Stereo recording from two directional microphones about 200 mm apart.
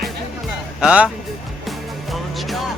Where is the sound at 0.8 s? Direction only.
5° right (ahead or behind).